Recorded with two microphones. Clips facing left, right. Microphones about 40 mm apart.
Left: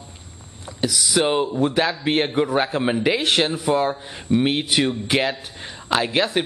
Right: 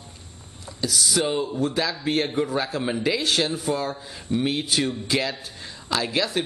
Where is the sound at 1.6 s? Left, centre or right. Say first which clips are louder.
Left 5 dB; left.